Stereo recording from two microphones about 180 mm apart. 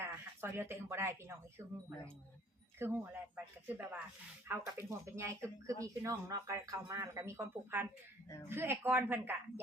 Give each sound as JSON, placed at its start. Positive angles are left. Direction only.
{"t": 0.0, "sound": "speech", "side_deg": -15}
{"t": 2.8, "sound": "speech", "side_deg": -15}